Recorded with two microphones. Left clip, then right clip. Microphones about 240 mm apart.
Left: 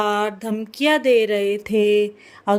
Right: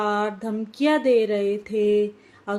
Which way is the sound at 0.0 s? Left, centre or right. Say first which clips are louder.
Left 3 dB; left.